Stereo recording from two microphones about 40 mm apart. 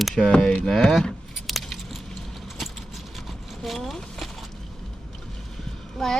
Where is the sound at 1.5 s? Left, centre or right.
Centre.